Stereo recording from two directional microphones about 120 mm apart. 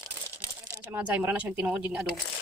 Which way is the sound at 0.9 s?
15° right (ahead or behind).